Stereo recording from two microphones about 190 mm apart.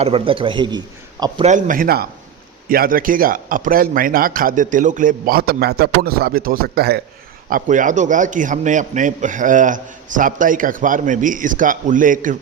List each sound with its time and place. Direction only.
0.0 s a man's voice: 30° right (ahead or behind)
1.5 s a man's voice: 40° right (ahead or behind)
7.5 s a man's voice: 45° right (ahead or behind)